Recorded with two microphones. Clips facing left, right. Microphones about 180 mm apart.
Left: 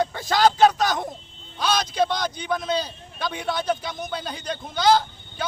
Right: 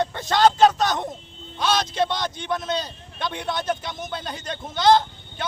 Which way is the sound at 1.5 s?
Centre (ahead or behind).